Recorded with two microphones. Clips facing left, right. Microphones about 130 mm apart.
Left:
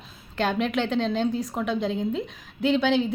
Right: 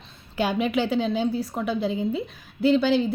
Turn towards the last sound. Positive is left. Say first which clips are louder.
# right 2 dB
turn(degrees=0)  # may be behind; listen again after turning